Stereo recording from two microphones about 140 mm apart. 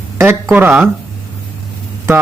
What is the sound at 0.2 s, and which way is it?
Speech, 15° right (ahead or behind).